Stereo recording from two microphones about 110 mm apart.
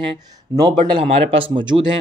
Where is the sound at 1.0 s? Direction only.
55° right (ahead or behind).